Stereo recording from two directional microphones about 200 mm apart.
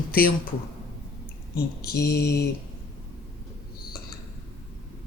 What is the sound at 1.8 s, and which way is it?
Speech, 50° left (ahead or behind).